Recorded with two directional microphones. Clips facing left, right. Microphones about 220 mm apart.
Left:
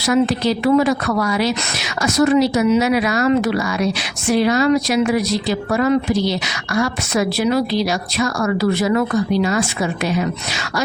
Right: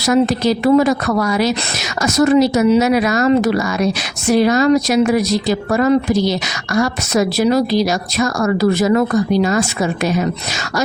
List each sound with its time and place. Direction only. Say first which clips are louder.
0.0 s speech: right 2 dB; 45° right (ahead or behind)